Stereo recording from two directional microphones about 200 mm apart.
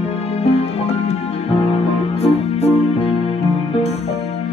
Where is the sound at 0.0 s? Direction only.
30° left (ahead or behind).